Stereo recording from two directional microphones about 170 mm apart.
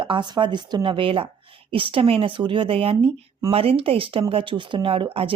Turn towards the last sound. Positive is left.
turn(degrees=-30)  # may be behind; listen again after turning